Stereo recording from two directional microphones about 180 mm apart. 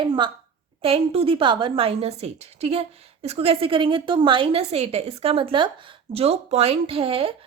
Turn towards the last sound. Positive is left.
turn(degrees=-30)  # may be behind; listen again after turning